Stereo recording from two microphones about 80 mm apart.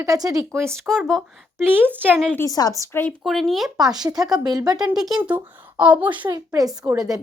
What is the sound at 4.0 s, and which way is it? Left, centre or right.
Speech, right.